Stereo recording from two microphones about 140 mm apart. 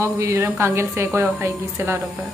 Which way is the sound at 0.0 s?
20° right (ahead or behind).